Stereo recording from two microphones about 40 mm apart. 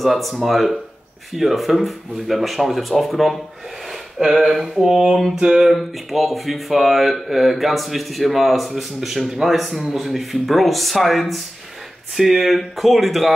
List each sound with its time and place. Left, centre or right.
0.0 s speech: centre
5.4 s a sound: centre
5.7 s speech: centre